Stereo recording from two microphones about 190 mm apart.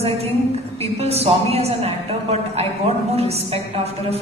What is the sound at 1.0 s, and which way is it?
Speech, 35° right (ahead or behind).